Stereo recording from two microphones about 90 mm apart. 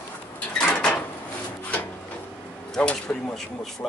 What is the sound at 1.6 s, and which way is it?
Wood, 20° left (ahead or behind).